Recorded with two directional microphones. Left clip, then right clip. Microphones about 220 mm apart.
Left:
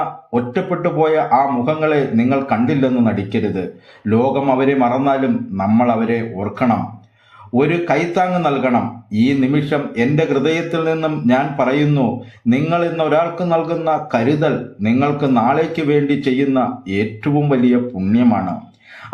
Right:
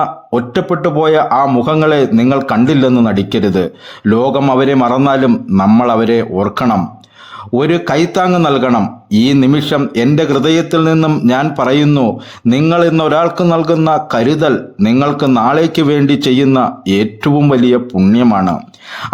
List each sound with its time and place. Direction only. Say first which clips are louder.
0.3 s a man's voice: right 5 dB; 50° right (ahead or behind)